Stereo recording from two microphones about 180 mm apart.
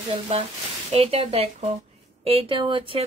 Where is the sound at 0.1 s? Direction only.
35° right (ahead or behind).